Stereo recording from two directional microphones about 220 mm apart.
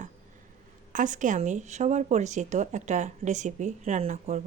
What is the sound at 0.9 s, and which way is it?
Speech, 35° right (ahead or behind).